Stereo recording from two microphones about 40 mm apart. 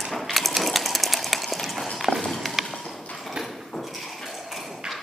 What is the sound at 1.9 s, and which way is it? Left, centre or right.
Run, centre.